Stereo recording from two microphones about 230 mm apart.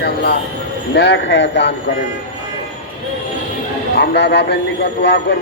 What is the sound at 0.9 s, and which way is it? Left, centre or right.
Speech, left.